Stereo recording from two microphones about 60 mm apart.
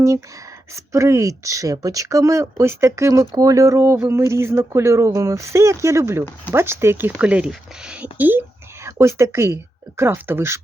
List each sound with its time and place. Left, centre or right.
0.7 s speech: right
4.0 s speech: right
7.2 s speech: centre
8.2 s speech: right
8.8 s speech: right